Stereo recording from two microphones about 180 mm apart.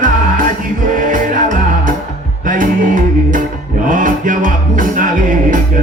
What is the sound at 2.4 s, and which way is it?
Music, 45° right (ahead or behind).